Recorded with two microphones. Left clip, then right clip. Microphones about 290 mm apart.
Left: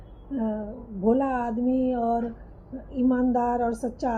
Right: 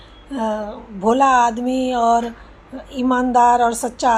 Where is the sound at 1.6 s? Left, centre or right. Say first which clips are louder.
Right 5 dB; right.